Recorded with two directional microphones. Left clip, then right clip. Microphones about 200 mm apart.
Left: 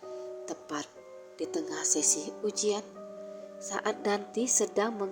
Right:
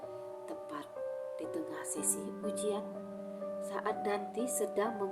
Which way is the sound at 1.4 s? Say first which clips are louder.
Left 6 dB; 30° left (ahead or behind).